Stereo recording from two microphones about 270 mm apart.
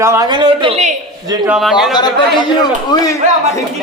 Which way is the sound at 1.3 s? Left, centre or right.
Centre.